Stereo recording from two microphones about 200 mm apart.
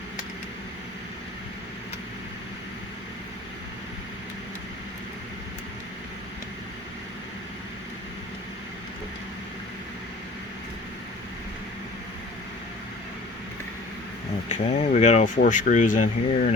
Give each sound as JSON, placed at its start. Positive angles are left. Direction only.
{"t": 14.5, "sound": "speech", "side_deg": 35}